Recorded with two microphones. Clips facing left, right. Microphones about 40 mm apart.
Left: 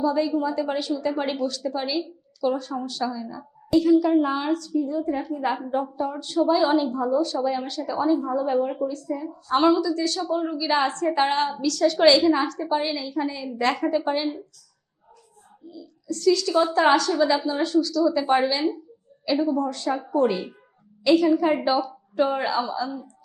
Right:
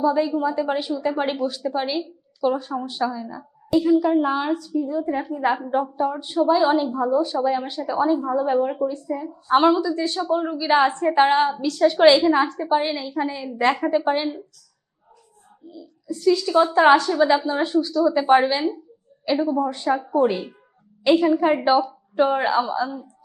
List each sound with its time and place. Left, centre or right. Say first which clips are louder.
0.0 s a woman's voice: right 2 dB; centre
15.7 s a woman's voice: even; right